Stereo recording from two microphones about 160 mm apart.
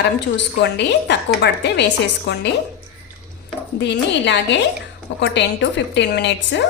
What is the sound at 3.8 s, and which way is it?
A woman's voice, 90° left.